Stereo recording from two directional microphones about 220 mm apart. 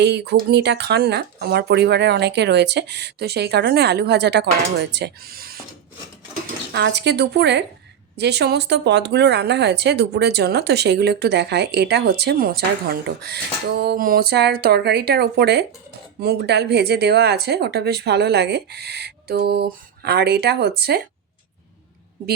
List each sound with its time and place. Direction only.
0.0 s speech: 50° right (ahead or behind)
6.7 s speech: 50° right (ahead or behind)